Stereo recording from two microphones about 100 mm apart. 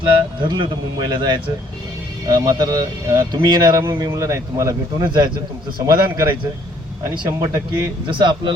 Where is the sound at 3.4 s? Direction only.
45° right (ahead or behind).